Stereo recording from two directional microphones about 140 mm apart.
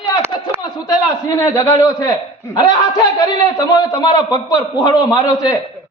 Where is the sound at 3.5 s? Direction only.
25° left (ahead or behind).